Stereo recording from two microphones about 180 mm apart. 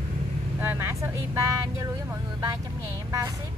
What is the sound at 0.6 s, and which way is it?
Speech, 15° right (ahead or behind).